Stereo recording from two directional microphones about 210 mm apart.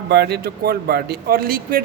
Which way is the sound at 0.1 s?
50° right (ahead or behind).